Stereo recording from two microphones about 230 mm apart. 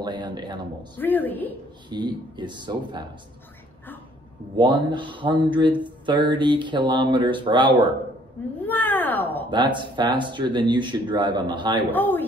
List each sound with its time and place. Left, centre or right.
0.0 s speech: centre
0.9 s a woman's voice: centre
1.9 s speech: centre
4.6 s speech: right
8.6 s a sound: centre
9.5 s speech: centre
11.9 s a woman's voice: centre